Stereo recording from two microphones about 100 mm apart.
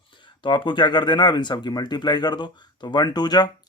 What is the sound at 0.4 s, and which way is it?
Speech, 55° left (ahead or behind).